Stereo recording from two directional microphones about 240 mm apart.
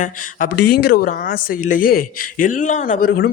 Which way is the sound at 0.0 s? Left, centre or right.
Left.